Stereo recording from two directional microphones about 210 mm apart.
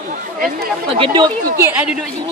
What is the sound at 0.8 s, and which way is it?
Speech, 25° right (ahead or behind).